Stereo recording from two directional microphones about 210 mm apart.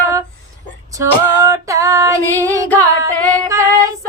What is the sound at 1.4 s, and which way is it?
Female singing, 15° right (ahead or behind).